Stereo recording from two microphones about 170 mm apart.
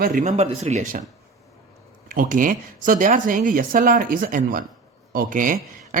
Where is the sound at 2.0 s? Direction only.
55° right (ahead or behind).